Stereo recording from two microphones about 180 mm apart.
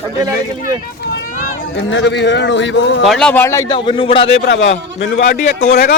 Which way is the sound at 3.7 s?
30° left (ahead or behind).